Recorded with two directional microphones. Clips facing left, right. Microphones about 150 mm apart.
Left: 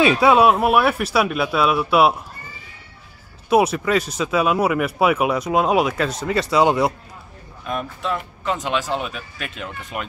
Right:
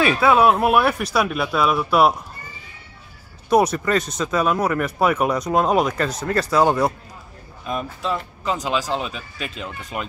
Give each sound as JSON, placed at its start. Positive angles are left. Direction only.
{"t": 0.0, "sound": "speech", "side_deg": 20}
{"t": 0.4, "sound": "speech", "side_deg": 5}
{"t": 3.4, "sound": "speech", "side_deg": 5}